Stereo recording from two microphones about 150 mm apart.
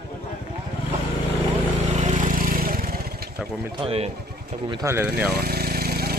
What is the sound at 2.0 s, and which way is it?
Motorcycle, 55° right (ahead or behind).